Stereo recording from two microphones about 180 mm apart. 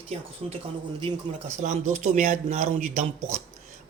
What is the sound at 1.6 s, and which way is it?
Speech, 40° right (ahead or behind).